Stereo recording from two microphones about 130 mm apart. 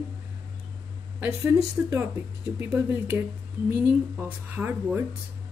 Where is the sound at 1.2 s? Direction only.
15° right (ahead or behind).